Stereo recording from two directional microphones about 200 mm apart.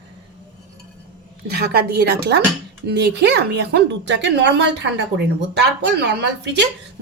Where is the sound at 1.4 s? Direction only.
50° right (ahead or behind).